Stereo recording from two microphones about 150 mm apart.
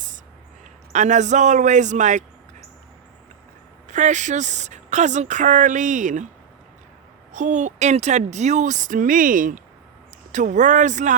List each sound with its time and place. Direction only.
0.9 s speech: 50° right (ahead or behind)
3.8 s speech: 55° right (ahead or behind)
7.3 s speech: 55° right (ahead or behind)